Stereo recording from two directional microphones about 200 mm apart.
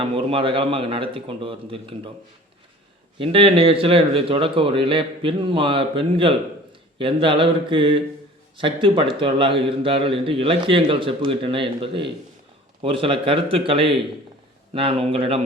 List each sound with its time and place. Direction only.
0.0 s a man's voice: 25° right (ahead or behind)
3.2 s a man's voice: 30° right (ahead or behind)